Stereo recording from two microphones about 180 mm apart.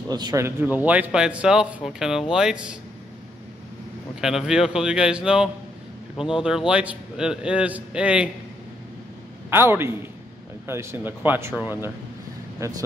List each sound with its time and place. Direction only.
0.1 s a man's voice: 20° right (ahead or behind); by 2.8 s 5° right (ahead or behind)
4.2 s a man's voice: centre (ahead or behind)
9.5 s a man's voice: 15° right (ahead or behind)